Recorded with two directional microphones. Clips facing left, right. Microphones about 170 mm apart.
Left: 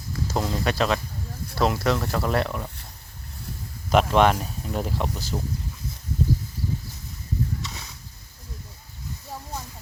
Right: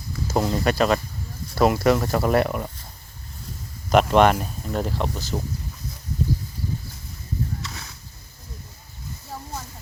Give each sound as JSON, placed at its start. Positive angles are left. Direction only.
{"t": 0.3, "sound": "speech", "side_deg": -5}
{"t": 3.8, "sound": "speech", "side_deg": 0}
{"t": 7.6, "sound": "a sound", "side_deg": 15}